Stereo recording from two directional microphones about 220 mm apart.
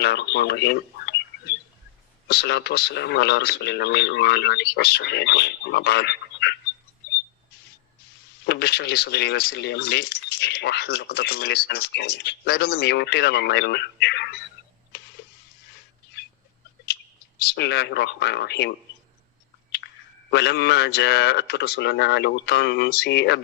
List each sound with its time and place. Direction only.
0.0 s speech: 50° left (ahead or behind)
8.4 s speech: 50° left (ahead or behind)
17.4 s speech: 50° left (ahead or behind)
20.3 s speech: 50° left (ahead or behind)